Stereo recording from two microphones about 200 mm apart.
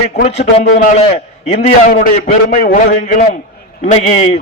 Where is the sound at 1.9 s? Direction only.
45° left (ahead or behind).